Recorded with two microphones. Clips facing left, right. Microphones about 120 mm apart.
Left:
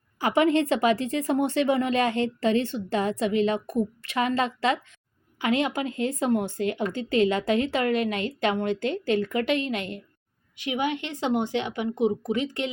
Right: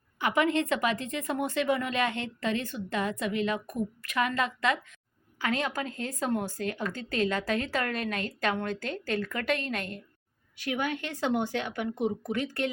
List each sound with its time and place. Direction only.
0.2 s a woman's voice: 30° left (ahead or behind)